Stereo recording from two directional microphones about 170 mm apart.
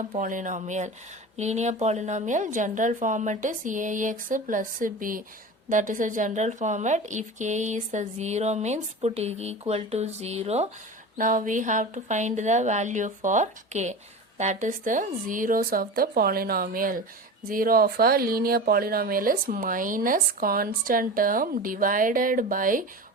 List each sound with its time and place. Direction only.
0.2 s a woman's voice: 45° right (ahead or behind)
11.2 s a woman's voice: 50° right (ahead or behind)